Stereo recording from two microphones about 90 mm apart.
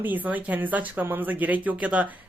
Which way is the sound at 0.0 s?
20° right (ahead or behind).